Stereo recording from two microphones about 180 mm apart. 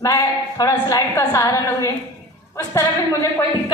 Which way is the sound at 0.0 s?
20° left (ahead or behind).